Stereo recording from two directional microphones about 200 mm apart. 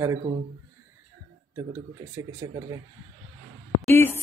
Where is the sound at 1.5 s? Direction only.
15° right (ahead or behind).